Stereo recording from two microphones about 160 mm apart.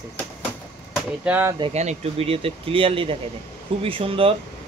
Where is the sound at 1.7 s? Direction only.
45° right (ahead or behind).